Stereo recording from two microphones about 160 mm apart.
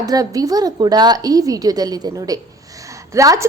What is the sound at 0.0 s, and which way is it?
A woman's voice, 25° right (ahead or behind).